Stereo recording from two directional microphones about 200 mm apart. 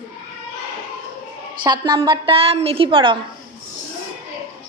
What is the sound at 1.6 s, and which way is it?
A woman's voice, 20° right (ahead or behind).